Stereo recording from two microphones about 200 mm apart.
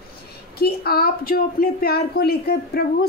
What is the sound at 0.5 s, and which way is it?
A woman's voice, 50° left (ahead or behind).